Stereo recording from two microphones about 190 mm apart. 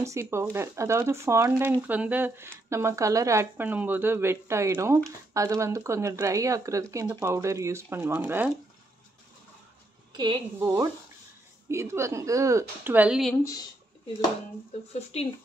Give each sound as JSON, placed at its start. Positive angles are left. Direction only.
{"t": 0.0, "sound": "speech", "side_deg": -15}
{"t": 10.1, "sound": "a woman's voice", "side_deg": -25}
{"t": 13.3, "sound": "speech", "side_deg": 15}
{"t": 15.1, "sound": "speech", "side_deg": 35}